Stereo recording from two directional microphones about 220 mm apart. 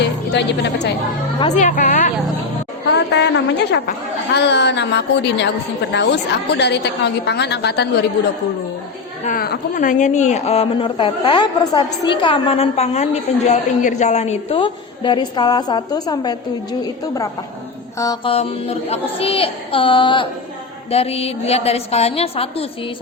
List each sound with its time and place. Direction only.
0.0 s a woman's voice: 50° left (ahead or behind)
1.4 s a woman's voice: 30° left (ahead or behind)
2.9 s a woman's voice: 50° left (ahead or behind)
9.2 s a woman's voice: 40° left (ahead or behind); by 16.4 s 20° left (ahead or behind)
17.9 s a woman's voice: 15° left (ahead or behind)